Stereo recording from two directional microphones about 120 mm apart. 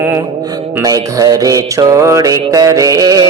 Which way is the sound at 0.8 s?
30° right (ahead or behind).